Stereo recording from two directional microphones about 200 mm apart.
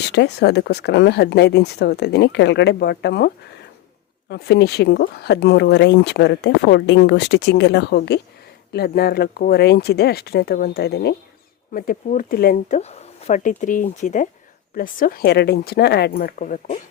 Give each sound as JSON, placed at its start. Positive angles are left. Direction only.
{"t": 0.1, "sound": "speech", "side_deg": 60}
{"t": 11.7, "sound": "speech", "side_deg": 45}